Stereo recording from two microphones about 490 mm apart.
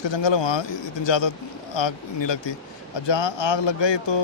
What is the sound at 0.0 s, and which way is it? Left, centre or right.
Speech, left.